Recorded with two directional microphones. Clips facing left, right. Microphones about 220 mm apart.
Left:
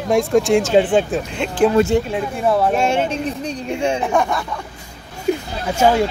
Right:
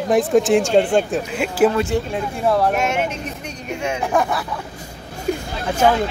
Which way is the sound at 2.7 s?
30° left (ahead or behind).